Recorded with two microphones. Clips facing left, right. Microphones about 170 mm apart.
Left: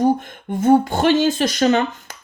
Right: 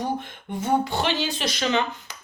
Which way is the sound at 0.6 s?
50° left (ahead or behind).